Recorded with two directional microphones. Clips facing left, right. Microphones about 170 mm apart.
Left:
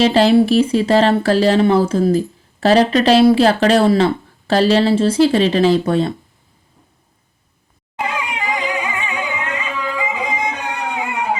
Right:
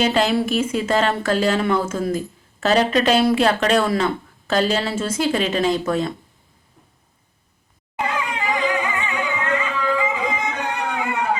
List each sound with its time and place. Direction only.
0.0 s speech: 35° left (ahead or behind)
8.0 s music: 15° left (ahead or behind)